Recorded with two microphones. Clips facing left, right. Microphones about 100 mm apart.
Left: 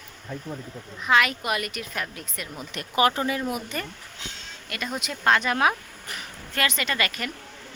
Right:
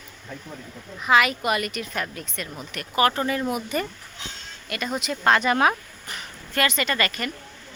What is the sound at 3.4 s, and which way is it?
A woman's voice, 5° right (ahead or behind).